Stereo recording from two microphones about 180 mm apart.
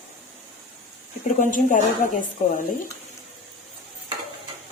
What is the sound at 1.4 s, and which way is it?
Speech, 45° left (ahead or behind).